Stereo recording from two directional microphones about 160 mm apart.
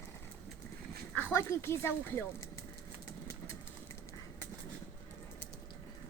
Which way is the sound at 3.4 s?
20° left (ahead or behind).